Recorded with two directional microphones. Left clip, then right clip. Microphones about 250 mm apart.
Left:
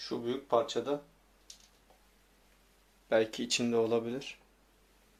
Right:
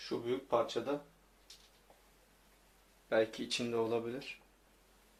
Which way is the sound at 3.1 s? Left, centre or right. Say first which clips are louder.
Left 4 dB; left.